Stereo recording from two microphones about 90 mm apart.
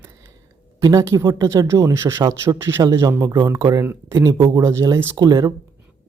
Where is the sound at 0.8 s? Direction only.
35° right (ahead or behind).